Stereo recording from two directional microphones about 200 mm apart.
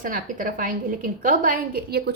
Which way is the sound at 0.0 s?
45° right (ahead or behind).